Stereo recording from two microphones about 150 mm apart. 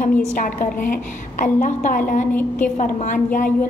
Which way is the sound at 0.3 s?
60° left (ahead or behind).